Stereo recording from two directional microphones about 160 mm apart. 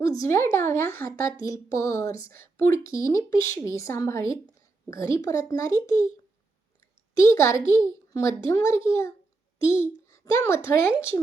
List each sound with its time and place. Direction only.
0.0 s speech: 20° left (ahead or behind)
7.3 s a child's voice: 20° left (ahead or behind)